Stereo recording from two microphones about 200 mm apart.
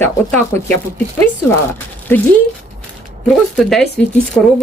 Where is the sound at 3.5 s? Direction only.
Centre (ahead or behind).